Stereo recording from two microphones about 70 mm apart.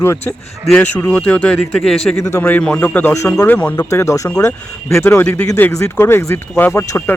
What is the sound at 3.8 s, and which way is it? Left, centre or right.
Speech, left.